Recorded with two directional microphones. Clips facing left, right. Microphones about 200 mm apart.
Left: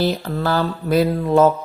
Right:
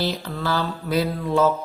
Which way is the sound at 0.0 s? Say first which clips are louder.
Left 6 dB; 50° left (ahead or behind).